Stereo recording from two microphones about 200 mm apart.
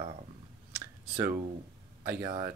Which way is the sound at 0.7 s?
10° right (ahead or behind).